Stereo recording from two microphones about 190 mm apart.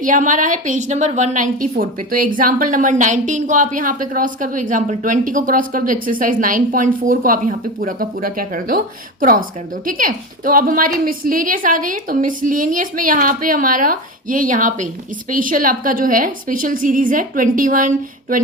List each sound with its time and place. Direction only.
0.0 s a woman's voice: 45° right (ahead or behind)
9.8 s a woman's voice: 45° right (ahead or behind)